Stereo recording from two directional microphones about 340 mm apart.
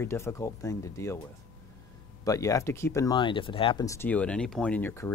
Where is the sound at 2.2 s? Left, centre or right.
Centre.